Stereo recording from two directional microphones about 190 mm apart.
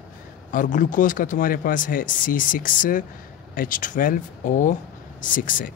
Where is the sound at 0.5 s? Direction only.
45° left (ahead or behind).